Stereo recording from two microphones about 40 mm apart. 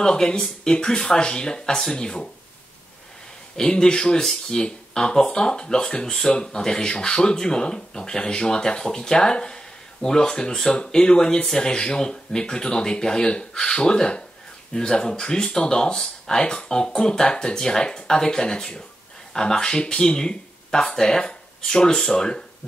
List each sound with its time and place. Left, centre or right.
0.0 s speech: centre
3.5 s speech: centre